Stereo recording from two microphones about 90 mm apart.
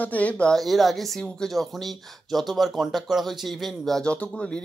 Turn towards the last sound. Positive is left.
turn(degrees=10)  # may be behind; listen again after turning